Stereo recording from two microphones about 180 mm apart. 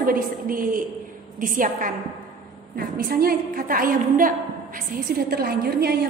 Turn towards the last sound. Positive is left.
turn(degrees=-60)  # may be behind; listen again after turning